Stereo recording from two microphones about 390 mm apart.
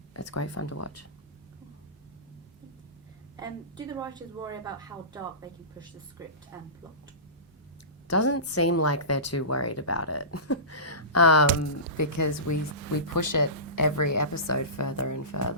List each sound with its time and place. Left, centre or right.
0.1 s speech: left
3.3 s a woman's voice: centre
8.0 s a woman's voice: left